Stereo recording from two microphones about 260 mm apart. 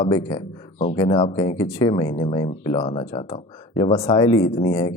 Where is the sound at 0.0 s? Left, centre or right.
Centre.